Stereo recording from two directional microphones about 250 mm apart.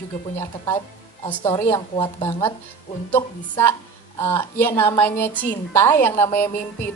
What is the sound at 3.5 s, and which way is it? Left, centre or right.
A woman's voice, centre.